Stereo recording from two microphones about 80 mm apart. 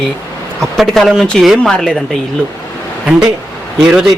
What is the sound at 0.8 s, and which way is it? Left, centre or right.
A man's voice, centre.